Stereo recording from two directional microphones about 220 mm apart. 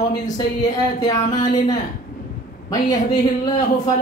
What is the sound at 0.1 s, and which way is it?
Speech, 20° left (ahead or behind).